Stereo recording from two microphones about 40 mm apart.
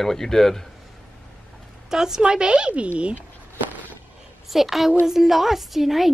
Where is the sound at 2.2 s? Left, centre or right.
Right.